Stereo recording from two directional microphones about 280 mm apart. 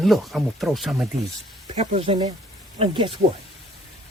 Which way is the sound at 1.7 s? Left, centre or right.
Right.